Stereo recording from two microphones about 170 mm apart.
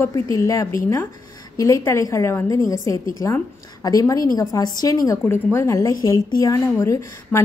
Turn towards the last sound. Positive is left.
turn(degrees=20)  # may be behind; listen again after turning